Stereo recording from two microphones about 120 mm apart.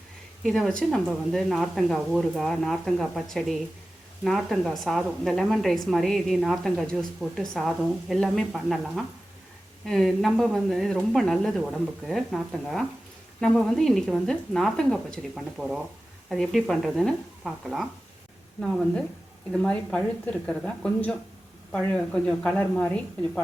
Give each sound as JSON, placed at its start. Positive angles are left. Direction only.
{"t": 0.4, "sound": "a woman's voice", "side_deg": 5}
{"t": 15.5, "sound": "a woman's voice", "side_deg": -5}